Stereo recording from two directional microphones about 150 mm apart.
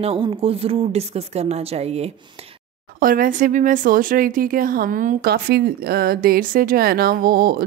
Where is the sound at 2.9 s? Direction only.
70° right (ahead or behind).